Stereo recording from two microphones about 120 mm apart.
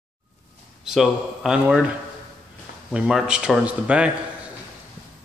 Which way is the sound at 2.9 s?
5° right (ahead or behind).